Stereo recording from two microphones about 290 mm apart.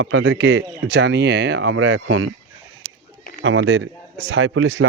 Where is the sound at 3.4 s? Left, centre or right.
Right.